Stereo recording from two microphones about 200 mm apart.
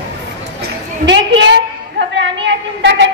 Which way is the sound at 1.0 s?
65° right (ahead or behind).